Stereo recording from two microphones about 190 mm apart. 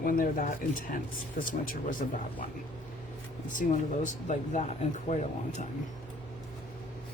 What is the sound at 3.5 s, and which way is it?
Speech, 40° left (ahead or behind).